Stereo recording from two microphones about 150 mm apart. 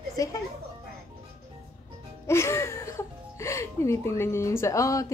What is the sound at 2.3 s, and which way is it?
Speech, 20° left (ahead or behind).